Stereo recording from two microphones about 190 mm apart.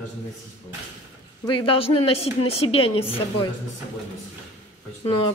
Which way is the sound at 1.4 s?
25° left (ahead or behind).